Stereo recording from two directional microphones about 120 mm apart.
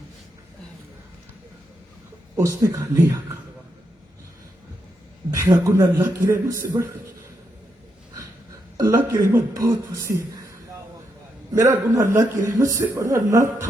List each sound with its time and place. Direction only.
2.3 s a man's voice: 30° right (ahead or behind)
5.3 s a man's voice: 30° right (ahead or behind)
8.8 s a man's voice: 30° right (ahead or behind)
11.6 s a man's voice: 25° right (ahead or behind)